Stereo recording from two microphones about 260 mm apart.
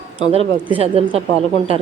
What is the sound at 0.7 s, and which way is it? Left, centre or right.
Speech, right.